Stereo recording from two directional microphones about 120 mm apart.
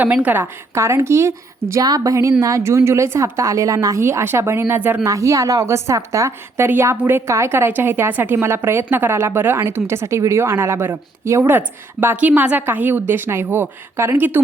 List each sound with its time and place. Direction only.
0.0 s a woman's voice: 15° right (ahead or behind)